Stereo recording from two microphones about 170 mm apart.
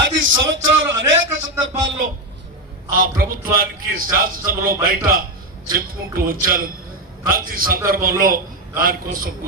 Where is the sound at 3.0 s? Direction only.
55° right (ahead or behind).